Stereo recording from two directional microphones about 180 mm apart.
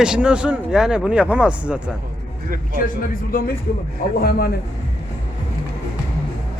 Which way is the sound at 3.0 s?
50° left (ahead or behind).